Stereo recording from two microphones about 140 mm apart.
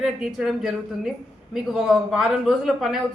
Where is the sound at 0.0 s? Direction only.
5° right (ahead or behind).